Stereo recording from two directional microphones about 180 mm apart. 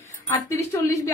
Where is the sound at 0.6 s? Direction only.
15° left (ahead or behind).